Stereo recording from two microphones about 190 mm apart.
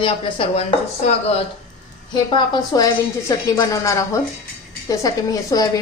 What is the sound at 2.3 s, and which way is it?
A woman's voice, 20° left (ahead or behind).